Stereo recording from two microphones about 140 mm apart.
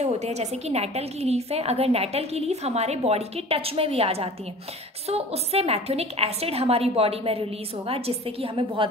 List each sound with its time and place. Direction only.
0.0 s a woman's voice: 50° right (ahead or behind)